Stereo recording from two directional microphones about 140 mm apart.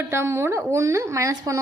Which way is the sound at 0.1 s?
20° right (ahead or behind).